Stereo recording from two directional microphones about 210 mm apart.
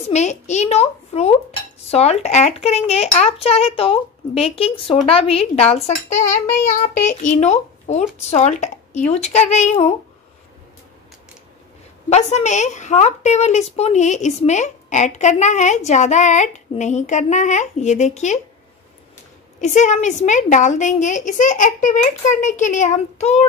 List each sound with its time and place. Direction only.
0.1 s a woman's voice: 35° left (ahead or behind)
12.1 s a woman's voice: 30° left (ahead or behind)
19.6 s a woman's voice: 35° left (ahead or behind)